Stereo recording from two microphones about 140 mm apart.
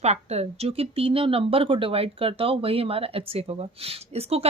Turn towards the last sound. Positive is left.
turn(degrees=-45)  # may be behind; listen again after turning